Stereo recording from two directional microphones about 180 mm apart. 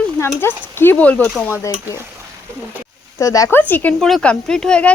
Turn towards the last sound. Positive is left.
turn(degrees=5)  # may be behind; listen again after turning